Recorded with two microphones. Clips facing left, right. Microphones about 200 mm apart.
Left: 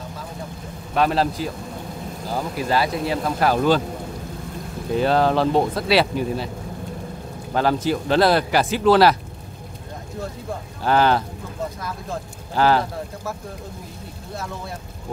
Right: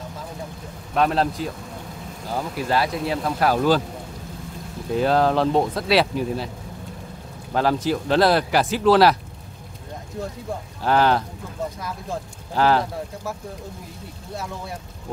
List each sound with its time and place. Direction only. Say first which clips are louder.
0.9 s speech: left 1 dB; centre (ahead or behind)
4.9 s speech: left 1 dB; centre (ahead or behind)
7.5 s speech: left 1 dB; centre (ahead or behind)
10.8 s speech: left 1 dB; centre (ahead or behind)
12.5 s speech: left 1 dB; centre (ahead or behind)